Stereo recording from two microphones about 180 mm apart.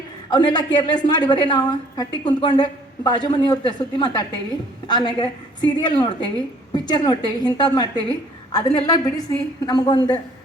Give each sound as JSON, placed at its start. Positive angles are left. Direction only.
{"t": 0.3, "sound": "a woman's voice", "side_deg": 25}